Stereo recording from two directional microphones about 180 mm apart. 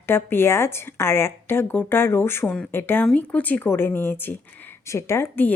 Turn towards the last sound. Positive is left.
turn(degrees=10)  # may be behind; listen again after turning